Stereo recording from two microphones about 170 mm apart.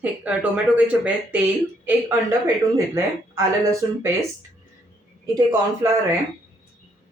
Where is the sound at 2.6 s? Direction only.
15° right (ahead or behind).